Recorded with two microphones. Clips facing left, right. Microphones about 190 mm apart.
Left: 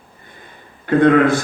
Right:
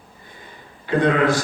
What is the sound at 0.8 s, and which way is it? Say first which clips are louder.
Speech: left 6 dB; 55° left (ahead or behind).